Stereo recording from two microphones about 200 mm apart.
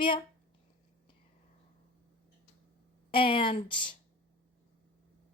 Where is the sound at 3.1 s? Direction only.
25° left (ahead or behind).